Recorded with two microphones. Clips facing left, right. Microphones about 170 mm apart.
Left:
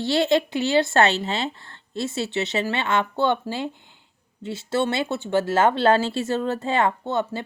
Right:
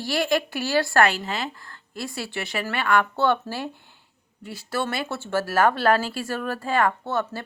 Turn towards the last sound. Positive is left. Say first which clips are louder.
# left 2 dB
turn(degrees=20)  # may be behind; listen again after turning